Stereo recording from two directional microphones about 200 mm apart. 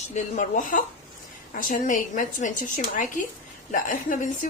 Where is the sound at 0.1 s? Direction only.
35° left (ahead or behind).